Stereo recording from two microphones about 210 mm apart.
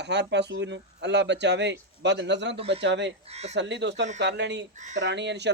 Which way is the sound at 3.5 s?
55° right (ahead or behind).